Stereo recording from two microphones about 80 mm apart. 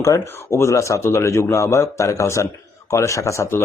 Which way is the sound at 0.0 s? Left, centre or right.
Left.